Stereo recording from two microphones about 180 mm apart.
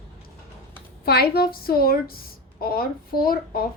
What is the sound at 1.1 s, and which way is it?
A woman's voice, 60° left (ahead or behind).